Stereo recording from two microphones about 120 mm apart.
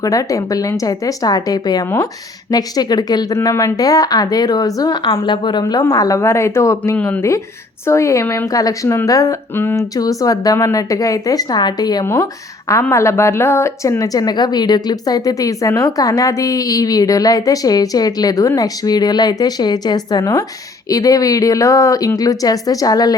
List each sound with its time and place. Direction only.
0.0 s speech: 30° left (ahead or behind)
6.9 s speech: 15° left (ahead or behind)
7.9 s speech: 25° left (ahead or behind)
9.6 s speech: 20° left (ahead or behind)
9.9 s speech: 30° left (ahead or behind)
12.0 s speech: 20° left (ahead or behind)